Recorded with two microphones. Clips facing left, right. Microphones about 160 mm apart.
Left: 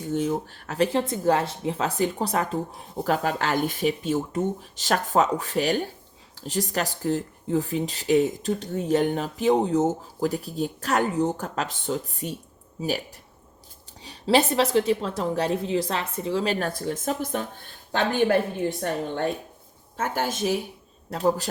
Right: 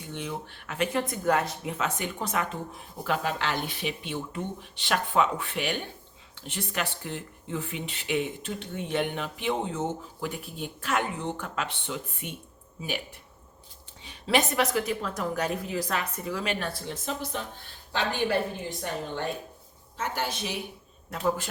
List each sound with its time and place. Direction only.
0.0 s speech: 40° left (ahead or behind)
14.0 s a woman's voice: 35° left (ahead or behind)